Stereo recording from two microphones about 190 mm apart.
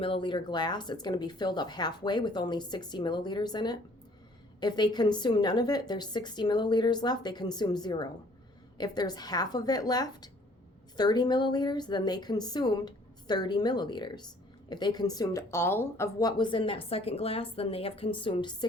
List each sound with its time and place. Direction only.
0.0 s speech: 25° left (ahead or behind)